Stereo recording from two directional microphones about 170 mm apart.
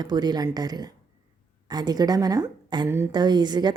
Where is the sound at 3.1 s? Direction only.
25° right (ahead or behind).